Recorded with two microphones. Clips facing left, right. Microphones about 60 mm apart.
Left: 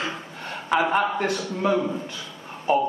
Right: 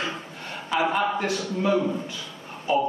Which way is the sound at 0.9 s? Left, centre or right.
Left.